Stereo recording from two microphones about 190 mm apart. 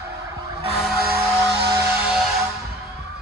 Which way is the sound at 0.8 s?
5° right (ahead or behind).